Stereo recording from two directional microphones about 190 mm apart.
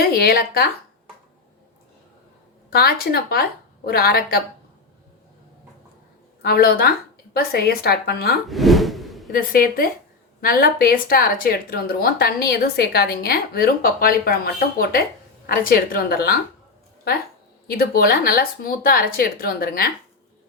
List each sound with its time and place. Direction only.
0.1 s a woman's voice: 55° left (ahead or behind)
2.6 s a woman's voice: 55° left (ahead or behind)
6.4 s a woman's voice: 55° left (ahead or behind)
8.4 s speech: centre (ahead or behind)
9.3 s speech: 50° left (ahead or behind)
17.7 s speech: 50° left (ahead or behind)